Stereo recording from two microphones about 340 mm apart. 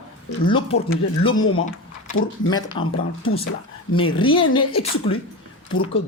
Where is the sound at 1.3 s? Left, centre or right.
Left.